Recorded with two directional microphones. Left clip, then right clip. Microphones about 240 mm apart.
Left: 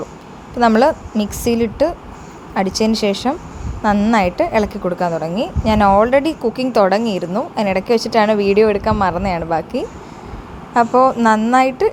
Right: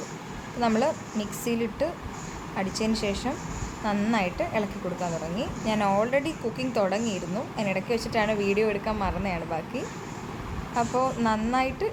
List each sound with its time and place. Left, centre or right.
0.6 s a woman's voice: left